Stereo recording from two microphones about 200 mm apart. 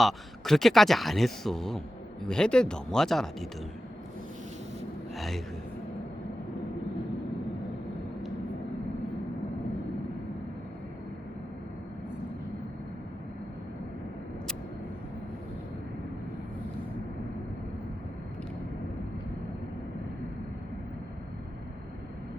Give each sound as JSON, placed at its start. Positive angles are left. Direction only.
{"t": 0.0, "sound": "speech", "side_deg": 0}
{"t": 5.1, "sound": "speech", "side_deg": 0}